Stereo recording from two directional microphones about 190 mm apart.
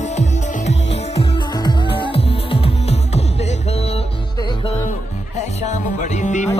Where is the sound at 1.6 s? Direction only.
25° left (ahead or behind).